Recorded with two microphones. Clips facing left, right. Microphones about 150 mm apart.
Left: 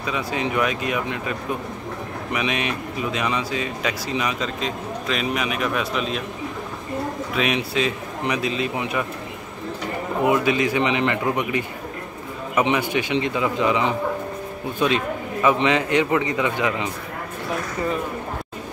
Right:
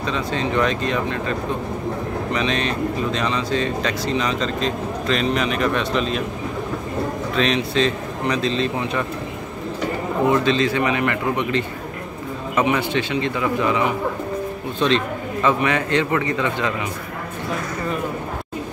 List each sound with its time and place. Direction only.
0.0 s a man's voice: 10° left (ahead or behind)
2.3 s a man's voice: 10° left (ahead or behind)
7.3 s a man's voice: 10° left (ahead or behind)
10.2 s a man's voice: 10° left (ahead or behind)
14.8 s a man's voice: 10° left (ahead or behind)